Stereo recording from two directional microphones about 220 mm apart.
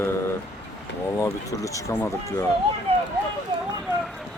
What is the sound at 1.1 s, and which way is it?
Speech, 15° left (ahead or behind).